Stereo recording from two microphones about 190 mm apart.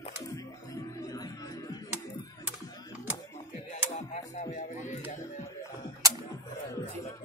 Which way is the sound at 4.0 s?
35° left (ahead or behind).